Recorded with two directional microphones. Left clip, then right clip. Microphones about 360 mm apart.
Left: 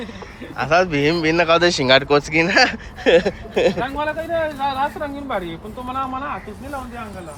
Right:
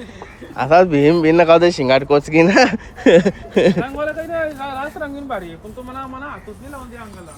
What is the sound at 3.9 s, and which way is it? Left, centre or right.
Speech, centre.